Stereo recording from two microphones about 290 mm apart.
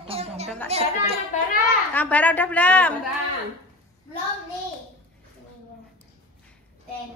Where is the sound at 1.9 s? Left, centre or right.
Centre.